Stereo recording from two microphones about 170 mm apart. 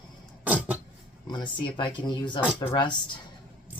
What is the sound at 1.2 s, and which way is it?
Speech, 25° left (ahead or behind).